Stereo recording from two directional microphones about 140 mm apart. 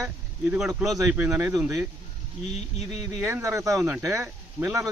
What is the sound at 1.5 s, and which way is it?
Speech, 5° right (ahead or behind).